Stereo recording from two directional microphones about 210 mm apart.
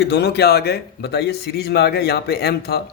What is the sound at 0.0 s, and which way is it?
Speech, 50° left (ahead or behind).